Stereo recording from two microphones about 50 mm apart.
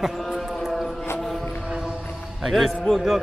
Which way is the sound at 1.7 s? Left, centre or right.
Centre.